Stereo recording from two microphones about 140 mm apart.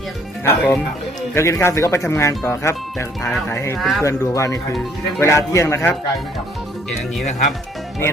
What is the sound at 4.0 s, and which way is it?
Speech, 20° left (ahead or behind).